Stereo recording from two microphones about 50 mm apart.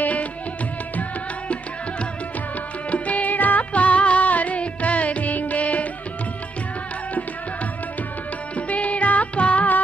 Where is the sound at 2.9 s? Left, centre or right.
Left.